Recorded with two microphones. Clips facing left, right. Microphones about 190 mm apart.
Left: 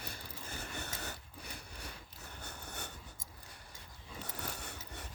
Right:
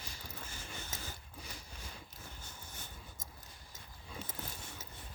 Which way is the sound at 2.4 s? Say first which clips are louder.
Left 6 dB; 65° left (ahead or behind).